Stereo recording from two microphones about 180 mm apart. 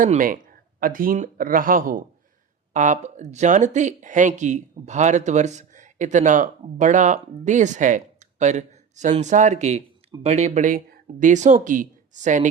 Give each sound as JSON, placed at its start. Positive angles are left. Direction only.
{"t": 0.0, "sound": "speech", "side_deg": -50}